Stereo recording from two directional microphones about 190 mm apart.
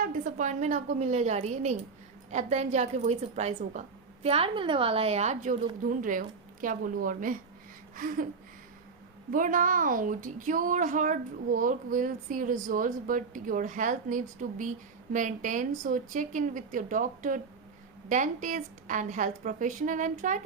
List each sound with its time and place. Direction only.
0.0 s a woman's voice: 45° right (ahead or behind)
9.3 s a woman's voice: 45° right (ahead or behind)